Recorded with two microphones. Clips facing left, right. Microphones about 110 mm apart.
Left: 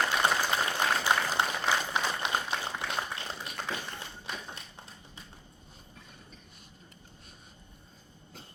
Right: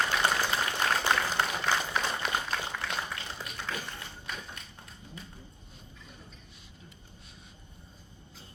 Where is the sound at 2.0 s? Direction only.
20° left (ahead or behind).